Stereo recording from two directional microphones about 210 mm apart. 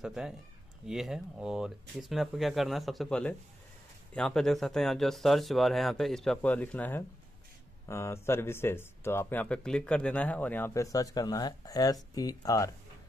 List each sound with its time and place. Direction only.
0.0 s speech: 5° right (ahead or behind); by 12.7 s 15° left (ahead or behind)